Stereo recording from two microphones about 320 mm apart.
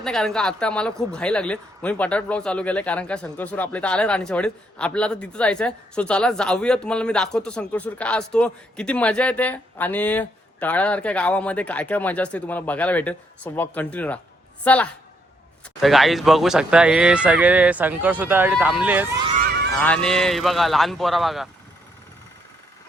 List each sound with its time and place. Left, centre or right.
0.0 s speech: centre
19.3 s a sound: right
19.8 s speech: centre